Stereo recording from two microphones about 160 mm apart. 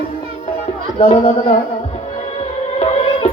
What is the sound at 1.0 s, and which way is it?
Speech, 45° left (ahead or behind).